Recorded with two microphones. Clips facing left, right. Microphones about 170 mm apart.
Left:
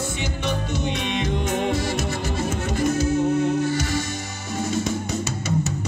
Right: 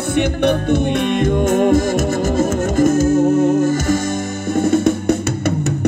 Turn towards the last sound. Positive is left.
turn(degrees=-60)  # may be behind; listen again after turning